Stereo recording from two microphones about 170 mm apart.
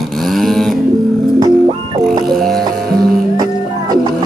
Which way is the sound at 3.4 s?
20° right (ahead or behind).